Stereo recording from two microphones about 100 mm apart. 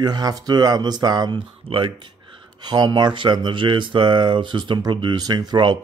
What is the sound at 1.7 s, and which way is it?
Speech, 55° right (ahead or behind).